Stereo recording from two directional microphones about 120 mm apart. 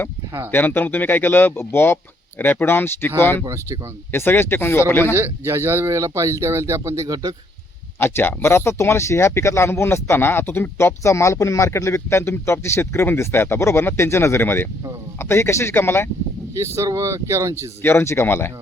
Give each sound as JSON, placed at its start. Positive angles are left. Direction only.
{"t": 0.5, "sound": "speech", "side_deg": 15}
{"t": 3.4, "sound": "speech", "side_deg": -25}
{"t": 4.1, "sound": "speech", "side_deg": 20}
{"t": 5.1, "sound": "speech", "side_deg": -20}
{"t": 7.9, "sound": "speech", "side_deg": 20}
{"t": 16.6, "sound": "speech", "side_deg": -25}
{"t": 17.8, "sound": "speech", "side_deg": 20}